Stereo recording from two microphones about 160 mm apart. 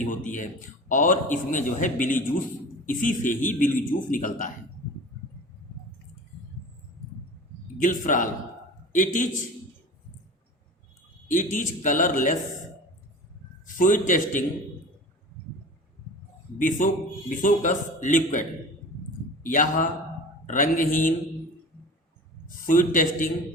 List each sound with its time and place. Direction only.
0.0 s a man's voice: 50° left (ahead or behind)
7.8 s a man's voice: 55° left (ahead or behind)
11.3 s a man's voice: 50° left (ahead or behind)
13.7 s a man's voice: 55° left (ahead or behind)
16.6 s a man's voice: 55° left (ahead or behind)
22.4 s a man's voice: 60° left (ahead or behind)